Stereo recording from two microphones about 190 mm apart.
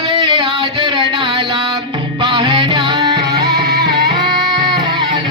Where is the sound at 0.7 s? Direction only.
25° right (ahead or behind).